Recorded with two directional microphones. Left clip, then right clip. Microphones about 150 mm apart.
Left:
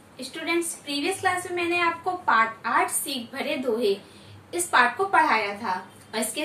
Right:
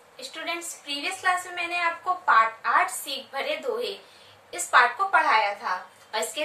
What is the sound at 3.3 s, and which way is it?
A woman's voice, 15° right (ahead or behind).